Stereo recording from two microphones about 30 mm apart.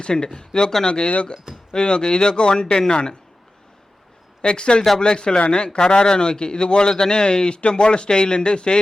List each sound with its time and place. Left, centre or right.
0.0 s a man's voice: left
4.4 s a man's voice: left